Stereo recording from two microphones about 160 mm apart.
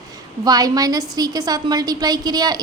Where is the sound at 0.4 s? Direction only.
25° right (ahead or behind).